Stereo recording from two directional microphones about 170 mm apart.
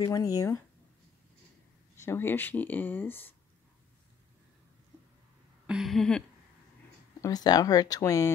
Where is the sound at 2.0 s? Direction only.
15° left (ahead or behind).